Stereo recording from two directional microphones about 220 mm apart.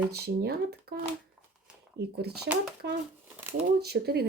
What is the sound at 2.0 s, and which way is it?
Speech, 45° right (ahead or behind).